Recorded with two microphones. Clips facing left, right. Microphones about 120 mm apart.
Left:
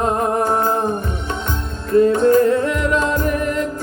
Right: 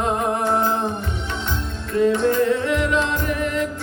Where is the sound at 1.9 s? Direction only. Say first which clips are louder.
Left 5 dB; 45° left (ahead or behind).